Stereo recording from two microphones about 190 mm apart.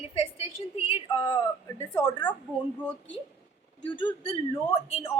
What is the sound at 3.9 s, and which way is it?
Speech, 25° left (ahead or behind).